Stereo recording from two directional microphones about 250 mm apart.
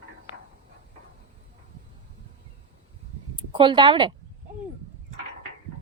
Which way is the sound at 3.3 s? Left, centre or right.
Centre.